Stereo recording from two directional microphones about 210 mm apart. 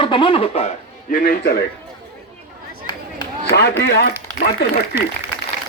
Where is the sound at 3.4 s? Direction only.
55° left (ahead or behind).